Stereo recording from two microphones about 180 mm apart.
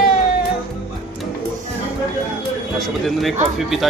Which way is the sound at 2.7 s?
Centre (ahead or behind).